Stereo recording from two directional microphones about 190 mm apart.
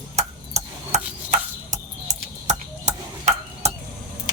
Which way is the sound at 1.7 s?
35° right (ahead or behind).